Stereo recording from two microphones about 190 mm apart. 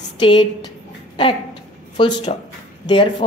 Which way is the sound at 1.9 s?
25° left (ahead or behind).